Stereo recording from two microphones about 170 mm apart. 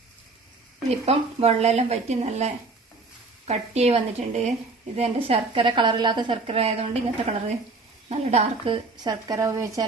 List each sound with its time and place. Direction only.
1.0 s a woman's voice: 40° right (ahead or behind); by 9.8 s 20° right (ahead or behind)